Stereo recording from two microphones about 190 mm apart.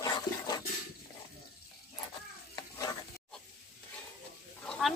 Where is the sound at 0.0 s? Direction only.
20° left (ahead or behind).